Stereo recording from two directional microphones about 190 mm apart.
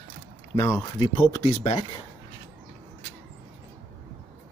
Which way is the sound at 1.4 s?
35° left (ahead or behind).